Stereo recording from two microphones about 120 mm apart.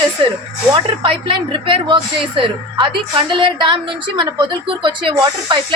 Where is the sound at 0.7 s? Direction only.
45° right (ahead or behind).